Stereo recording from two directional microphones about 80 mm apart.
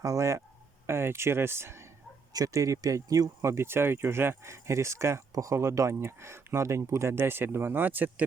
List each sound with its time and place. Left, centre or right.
0.0 s speech: right
2.3 s speech: right